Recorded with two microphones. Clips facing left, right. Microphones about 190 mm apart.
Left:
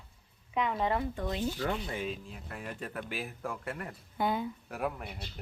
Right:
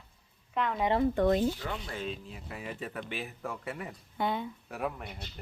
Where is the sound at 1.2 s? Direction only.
70° right (ahead or behind).